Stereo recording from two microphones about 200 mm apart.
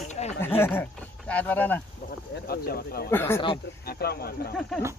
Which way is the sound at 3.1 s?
10° left (ahead or behind).